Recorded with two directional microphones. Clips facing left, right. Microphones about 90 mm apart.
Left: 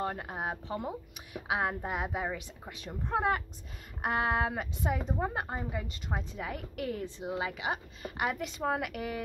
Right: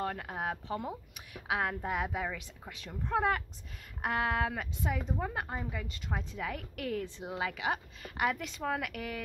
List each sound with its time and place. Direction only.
0.0 s speech: 25° left (ahead or behind)
7.2 s a woman's voice: 5° left (ahead or behind)